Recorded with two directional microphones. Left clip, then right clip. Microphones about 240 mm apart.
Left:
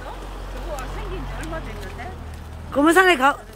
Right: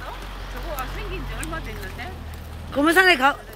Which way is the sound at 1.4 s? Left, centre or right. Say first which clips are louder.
Even; centre.